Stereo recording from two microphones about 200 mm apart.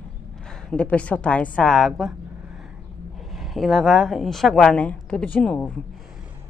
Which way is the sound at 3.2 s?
Centre (ahead or behind).